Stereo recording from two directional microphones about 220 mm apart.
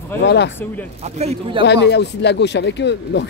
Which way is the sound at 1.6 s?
50° left (ahead or behind).